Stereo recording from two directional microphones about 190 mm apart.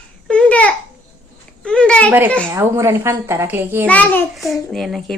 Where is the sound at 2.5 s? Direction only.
15° right (ahead or behind).